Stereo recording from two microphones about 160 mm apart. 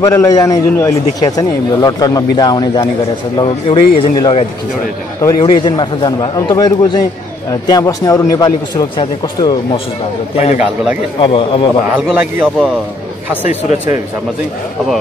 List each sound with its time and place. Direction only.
0.0 s a man's voice: 20° left (ahead or behind)
5.4 s a man's voice: 30° left (ahead or behind)
10.3 s speech: 40° left (ahead or behind)
10.6 s a man's voice: 10° right (ahead or behind)
11.1 s speech: 35° left (ahead or behind)
11.9 s a man's voice: 10° right (ahead or behind)
13.5 s speech: 50° left (ahead or behind)